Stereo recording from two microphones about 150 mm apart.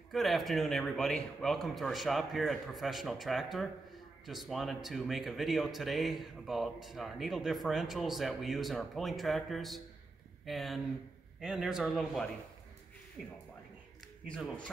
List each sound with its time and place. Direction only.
0.1 s speech: centre (ahead or behind)